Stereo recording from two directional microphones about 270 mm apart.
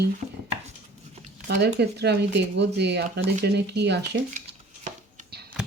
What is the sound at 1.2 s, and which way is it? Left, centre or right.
Speech, right.